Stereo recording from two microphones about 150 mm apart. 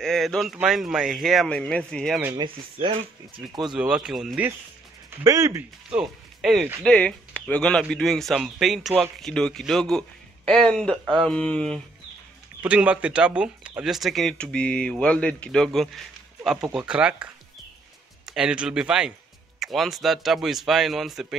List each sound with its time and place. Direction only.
0.0 s speech: 5° left (ahead or behind)
2.3 s speech: 35° right (ahead or behind)
3.7 s speech: 5° right (ahead or behind)
5.2 s speech: 20° right (ahead or behind)
5.9 s speech: 5° right (ahead or behind)
12.6 s speech: 10° right (ahead or behind)